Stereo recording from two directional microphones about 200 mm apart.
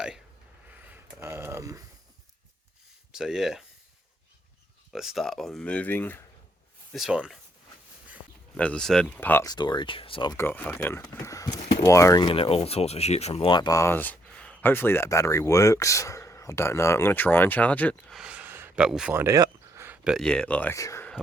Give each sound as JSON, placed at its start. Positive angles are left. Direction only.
{"t": 0.9, "sound": "a sound", "side_deg": -15}
{"t": 3.1, "sound": "speech", "side_deg": -5}
{"t": 4.9, "sound": "speech", "side_deg": 0}
{"t": 6.9, "sound": "speech", "side_deg": 0}
{"t": 8.5, "sound": "speech", "side_deg": 5}
{"t": 10.3, "sound": "speech", "side_deg": 10}
{"t": 18.2, "sound": "a sound", "side_deg": -5}